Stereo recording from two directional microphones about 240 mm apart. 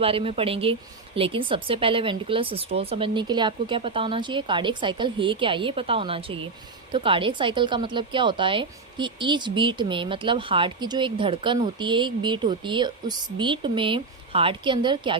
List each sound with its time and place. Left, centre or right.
0.0 s a woman's voice: right